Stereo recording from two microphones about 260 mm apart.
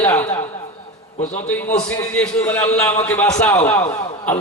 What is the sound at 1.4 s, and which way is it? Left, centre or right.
A man's voice, centre.